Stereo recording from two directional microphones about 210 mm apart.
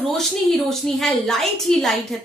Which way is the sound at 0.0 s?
Centre (ahead or behind).